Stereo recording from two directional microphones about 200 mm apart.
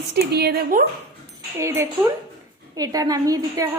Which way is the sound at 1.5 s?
10° right (ahead or behind).